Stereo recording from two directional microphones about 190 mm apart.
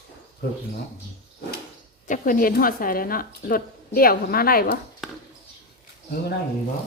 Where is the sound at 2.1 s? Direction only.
50° left (ahead or behind).